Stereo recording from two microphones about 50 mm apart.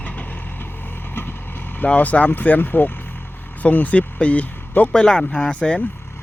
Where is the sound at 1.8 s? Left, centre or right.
Left.